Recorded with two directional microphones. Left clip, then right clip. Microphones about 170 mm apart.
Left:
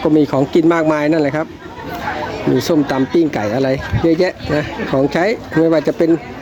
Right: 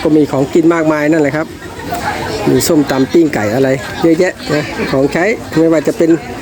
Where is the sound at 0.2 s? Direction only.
15° left (ahead or behind).